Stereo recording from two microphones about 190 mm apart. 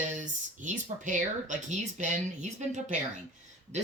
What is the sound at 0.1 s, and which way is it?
Speech, 40° right (ahead or behind).